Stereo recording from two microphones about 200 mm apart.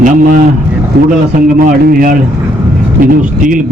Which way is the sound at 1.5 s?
45° right (ahead or behind).